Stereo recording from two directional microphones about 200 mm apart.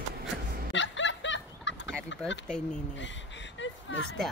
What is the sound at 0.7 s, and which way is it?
Fowl, 65° left (ahead or behind).